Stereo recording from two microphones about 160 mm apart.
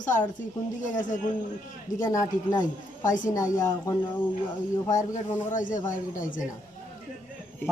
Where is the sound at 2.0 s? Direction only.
20° left (ahead or behind).